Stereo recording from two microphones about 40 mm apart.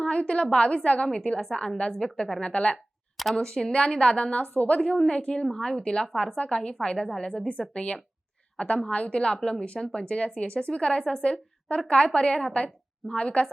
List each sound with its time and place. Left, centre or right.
0.0 s a sound: left
0.5 s a woman's voice: left
4.8 s a woman's voice: left
5.5 s a woman's voice: centre